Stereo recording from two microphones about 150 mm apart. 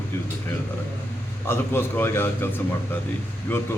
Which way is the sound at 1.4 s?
15° left (ahead or behind).